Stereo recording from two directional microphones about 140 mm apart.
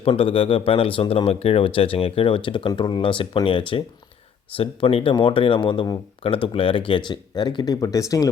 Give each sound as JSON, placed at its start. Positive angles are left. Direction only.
{"t": 0.0, "sound": "speech", "side_deg": 40}